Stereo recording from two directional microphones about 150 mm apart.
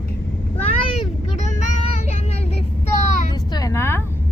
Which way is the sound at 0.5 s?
40° left (ahead or behind).